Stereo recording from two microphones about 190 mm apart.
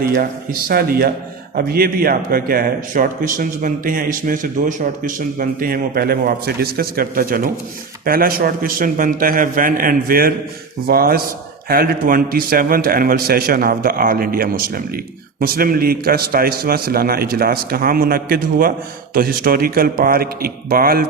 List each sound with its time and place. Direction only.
0.0 s a man's voice: 50° right (ahead or behind)